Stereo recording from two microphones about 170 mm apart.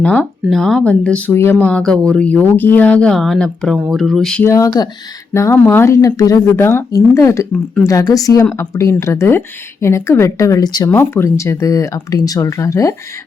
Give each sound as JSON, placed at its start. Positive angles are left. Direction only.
{"t": 0.0, "sound": "speech", "side_deg": 5}
{"t": 4.4, "sound": "a woman's voice", "side_deg": 20}